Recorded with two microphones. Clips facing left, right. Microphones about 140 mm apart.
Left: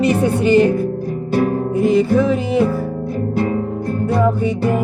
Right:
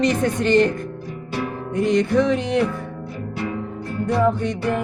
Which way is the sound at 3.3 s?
45° left (ahead or behind).